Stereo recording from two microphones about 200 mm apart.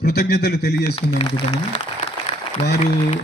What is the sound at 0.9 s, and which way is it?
Speech, 30° left (ahead or behind).